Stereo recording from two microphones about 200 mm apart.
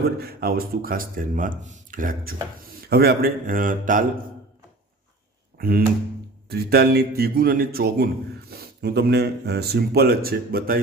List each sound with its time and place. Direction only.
0.2 s a man's voice: 50° right (ahead or behind)
5.5 s a man's voice: 50° right (ahead or behind)